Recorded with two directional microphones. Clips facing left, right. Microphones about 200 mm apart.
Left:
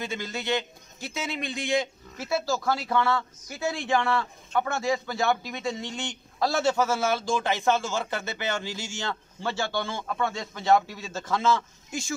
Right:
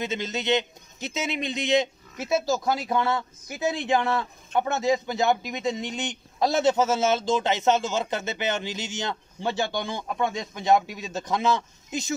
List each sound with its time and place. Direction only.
0.0 s a man's voice: 20° right (ahead or behind)